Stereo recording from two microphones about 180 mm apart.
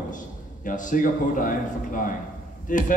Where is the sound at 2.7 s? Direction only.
45° left (ahead or behind).